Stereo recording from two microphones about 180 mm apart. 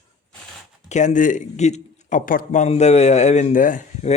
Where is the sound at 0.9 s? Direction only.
40° left (ahead or behind).